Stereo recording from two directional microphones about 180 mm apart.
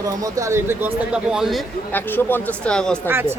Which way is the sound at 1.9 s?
10° left (ahead or behind).